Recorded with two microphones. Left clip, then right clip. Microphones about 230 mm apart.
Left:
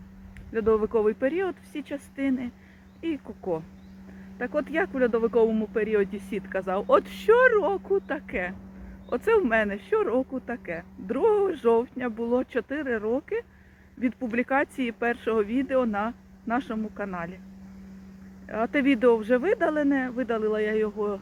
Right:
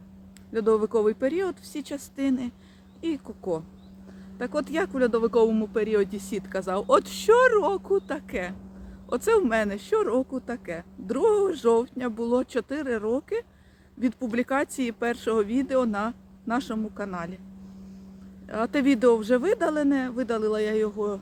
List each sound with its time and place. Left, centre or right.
0.5 s speech: centre
18.4 s speech: centre